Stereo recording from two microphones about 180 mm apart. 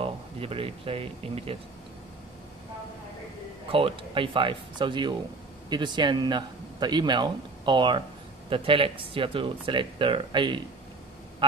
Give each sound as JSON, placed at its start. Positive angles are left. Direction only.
{"t": 0.0, "sound": "speech", "side_deg": -30}
{"t": 3.7, "sound": "speech", "side_deg": -30}